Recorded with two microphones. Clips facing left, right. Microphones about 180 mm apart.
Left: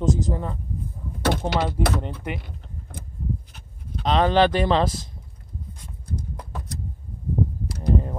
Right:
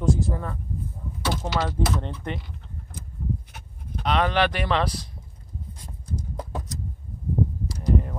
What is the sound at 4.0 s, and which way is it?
Speech, 30° left (ahead or behind).